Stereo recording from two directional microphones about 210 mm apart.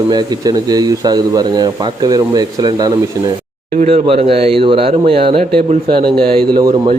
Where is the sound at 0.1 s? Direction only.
20° right (ahead or behind).